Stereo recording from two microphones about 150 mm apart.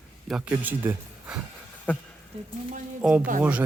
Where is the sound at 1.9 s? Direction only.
10° left (ahead or behind).